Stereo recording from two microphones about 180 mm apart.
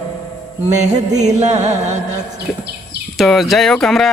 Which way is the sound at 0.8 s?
40° right (ahead or behind).